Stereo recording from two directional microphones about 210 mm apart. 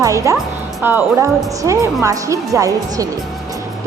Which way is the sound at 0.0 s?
15° right (ahead or behind).